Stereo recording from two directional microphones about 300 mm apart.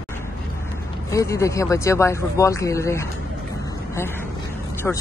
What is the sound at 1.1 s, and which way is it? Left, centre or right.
Speech, centre.